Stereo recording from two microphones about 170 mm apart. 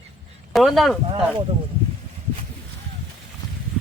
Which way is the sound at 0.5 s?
Centre (ahead or behind).